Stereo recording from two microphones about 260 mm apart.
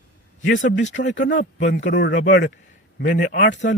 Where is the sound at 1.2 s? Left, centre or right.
Left.